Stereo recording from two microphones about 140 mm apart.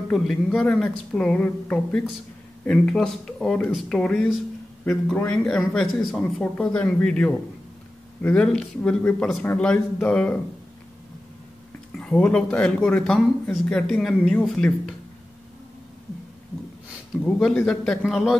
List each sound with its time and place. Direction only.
0.1 s a man's voice: 5° left (ahead or behind)
11.9 s a man's voice: 5° left (ahead or behind)
17.2 s a man's voice: centre (ahead or behind)